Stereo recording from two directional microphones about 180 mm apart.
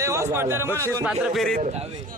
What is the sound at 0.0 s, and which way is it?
Speech, 15° right (ahead or behind).